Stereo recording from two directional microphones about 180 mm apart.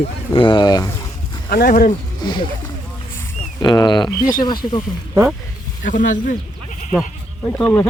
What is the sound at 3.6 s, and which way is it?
Speech, 25° left (ahead or behind).